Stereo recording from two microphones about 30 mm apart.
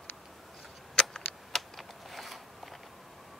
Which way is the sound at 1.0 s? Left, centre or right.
Centre.